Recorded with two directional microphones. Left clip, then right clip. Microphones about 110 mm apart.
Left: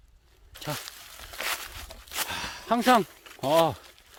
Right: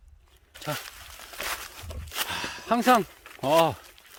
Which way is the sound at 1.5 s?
5° right (ahead or behind).